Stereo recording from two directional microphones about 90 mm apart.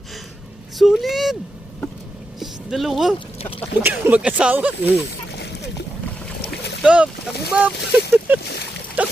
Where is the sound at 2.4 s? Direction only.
Centre (ahead or behind).